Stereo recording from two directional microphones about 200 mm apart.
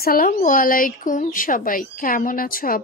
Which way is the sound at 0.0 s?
45° left (ahead or behind).